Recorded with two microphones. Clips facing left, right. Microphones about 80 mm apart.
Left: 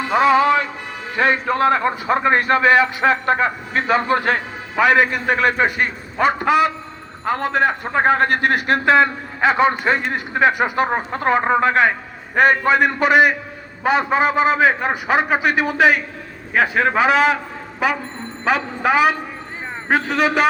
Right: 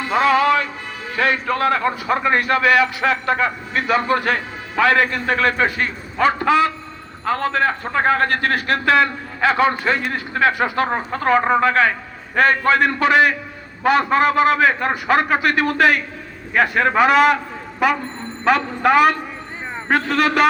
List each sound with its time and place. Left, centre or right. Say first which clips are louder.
0.0 s a man's voice: left 1 dB; centre
4.7 s a man's voice: left 1 dB; centre